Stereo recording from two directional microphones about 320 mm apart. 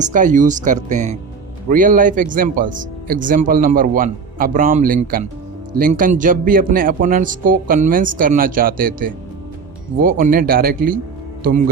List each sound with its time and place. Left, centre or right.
0.0 s speech: right